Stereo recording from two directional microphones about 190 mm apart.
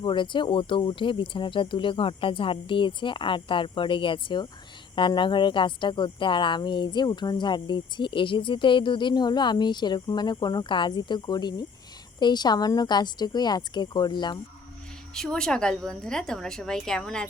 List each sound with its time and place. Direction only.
0.0 s speech: 25° left (ahead or behind)
15.1 s a woman's voice: 5° left (ahead or behind)